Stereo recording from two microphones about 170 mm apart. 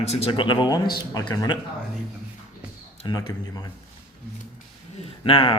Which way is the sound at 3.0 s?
25° left (ahead or behind).